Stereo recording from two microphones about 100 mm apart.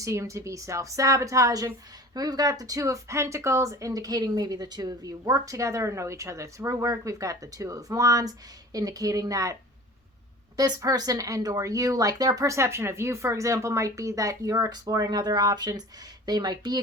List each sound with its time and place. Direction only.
0.0 s speech: 30° right (ahead or behind)
10.6 s speech: 40° right (ahead or behind)